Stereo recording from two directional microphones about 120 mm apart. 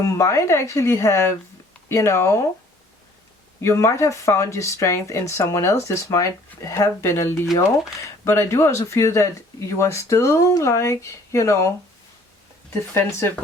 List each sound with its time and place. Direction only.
0.0 s speech: 25° left (ahead or behind)
3.6 s speech: 25° left (ahead or behind)
12.9 s speech: 20° left (ahead or behind)